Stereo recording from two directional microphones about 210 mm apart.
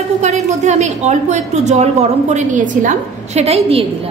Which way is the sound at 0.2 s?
35° right (ahead or behind).